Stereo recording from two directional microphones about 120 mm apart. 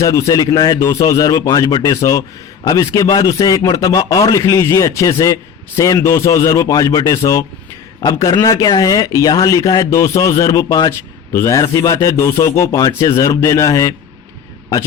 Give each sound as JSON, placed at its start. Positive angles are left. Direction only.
{"t": 0.0, "sound": "a man's voice", "side_deg": 25}